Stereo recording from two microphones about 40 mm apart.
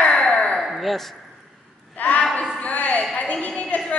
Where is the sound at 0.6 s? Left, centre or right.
Centre.